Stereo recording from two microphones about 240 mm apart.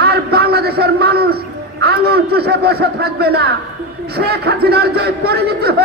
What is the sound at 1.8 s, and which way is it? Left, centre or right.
Speech, right.